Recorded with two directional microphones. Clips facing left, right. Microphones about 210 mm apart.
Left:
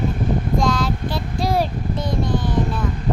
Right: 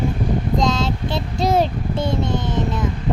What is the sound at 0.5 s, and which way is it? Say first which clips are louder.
Child singing: right 1 dB; 20° right (ahead or behind).